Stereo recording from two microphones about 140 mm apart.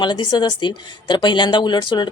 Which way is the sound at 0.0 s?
35° left (ahead or behind).